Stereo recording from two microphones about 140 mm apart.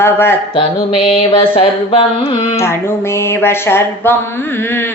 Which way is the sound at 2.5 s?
20° left (ahead or behind).